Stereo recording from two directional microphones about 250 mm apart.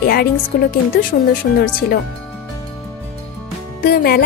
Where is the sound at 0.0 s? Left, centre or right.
Left.